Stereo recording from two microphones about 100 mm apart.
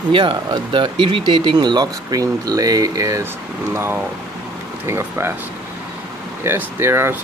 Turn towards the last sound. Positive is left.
turn(degrees=-25)  # may be behind; listen again after turning